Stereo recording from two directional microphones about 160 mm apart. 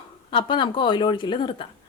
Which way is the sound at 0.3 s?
30° left (ahead or behind).